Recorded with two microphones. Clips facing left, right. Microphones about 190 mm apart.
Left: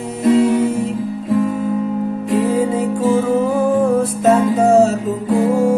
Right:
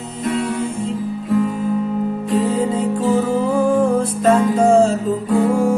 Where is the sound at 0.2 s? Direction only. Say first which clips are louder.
Left 8 dB; 25° left (ahead or behind).